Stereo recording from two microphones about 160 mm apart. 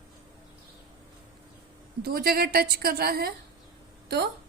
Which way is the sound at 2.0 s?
70° right (ahead or behind).